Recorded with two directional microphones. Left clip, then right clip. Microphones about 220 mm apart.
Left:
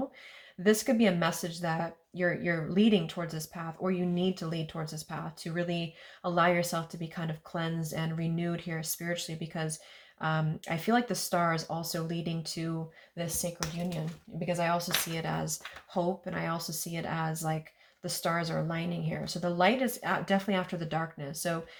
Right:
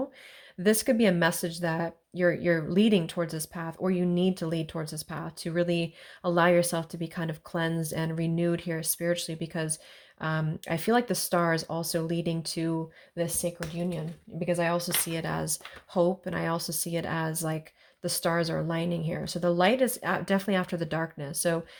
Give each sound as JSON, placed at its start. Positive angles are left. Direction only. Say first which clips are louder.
{"t": 0.6, "sound": "speech", "louder": "right 2 dB", "side_deg": -45}